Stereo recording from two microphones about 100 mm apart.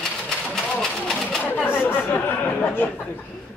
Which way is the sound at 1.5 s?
20° left (ahead or behind).